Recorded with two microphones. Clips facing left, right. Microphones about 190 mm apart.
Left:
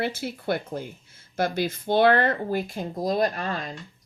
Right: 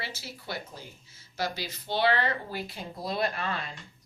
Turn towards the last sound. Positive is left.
turn(degrees=40)  # may be behind; listen again after turning